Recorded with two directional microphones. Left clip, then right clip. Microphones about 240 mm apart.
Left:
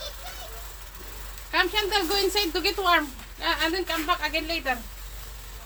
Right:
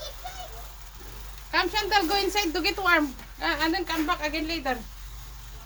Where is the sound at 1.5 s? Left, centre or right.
Right.